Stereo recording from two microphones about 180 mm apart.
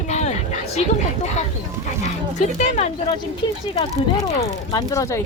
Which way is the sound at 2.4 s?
40° left (ahead or behind).